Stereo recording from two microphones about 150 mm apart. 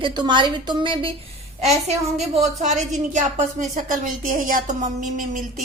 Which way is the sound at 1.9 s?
45° right (ahead or behind).